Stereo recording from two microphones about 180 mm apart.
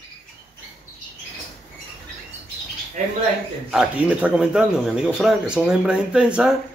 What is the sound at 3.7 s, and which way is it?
Speech, 5° right (ahead or behind).